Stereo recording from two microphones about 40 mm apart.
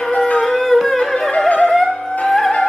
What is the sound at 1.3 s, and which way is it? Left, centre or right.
Music, left.